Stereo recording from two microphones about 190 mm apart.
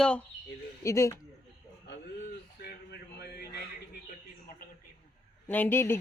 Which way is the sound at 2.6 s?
60° left (ahead or behind).